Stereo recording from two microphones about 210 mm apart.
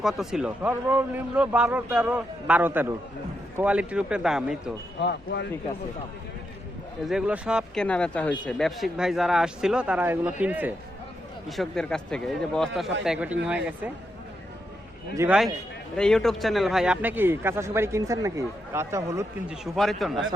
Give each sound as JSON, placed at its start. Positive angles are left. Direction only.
{"t": 0.0, "sound": "speech", "side_deg": 0}
{"t": 4.9, "sound": "speech", "side_deg": 55}
{"t": 7.0, "sound": "speech", "side_deg": -5}
{"t": 15.1, "sound": "speech", "side_deg": -15}
{"t": 16.0, "sound": "speech", "side_deg": 5}
{"t": 19.7, "sound": "speech", "side_deg": 0}